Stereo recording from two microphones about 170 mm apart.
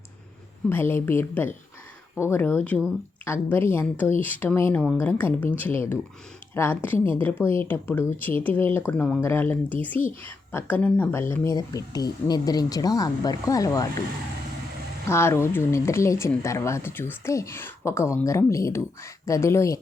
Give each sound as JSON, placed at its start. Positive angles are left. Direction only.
{"t": 0.7, "sound": "a woman's voice", "side_deg": 15}
{"t": 15.0, "sound": "speech", "side_deg": 15}